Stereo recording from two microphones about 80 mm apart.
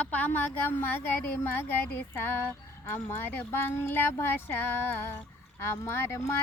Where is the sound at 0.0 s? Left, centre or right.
Centre.